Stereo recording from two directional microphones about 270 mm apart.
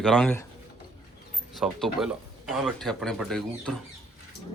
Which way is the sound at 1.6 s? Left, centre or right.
Centre.